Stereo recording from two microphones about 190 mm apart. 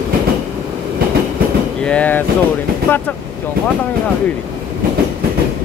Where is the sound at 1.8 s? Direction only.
5° left (ahead or behind).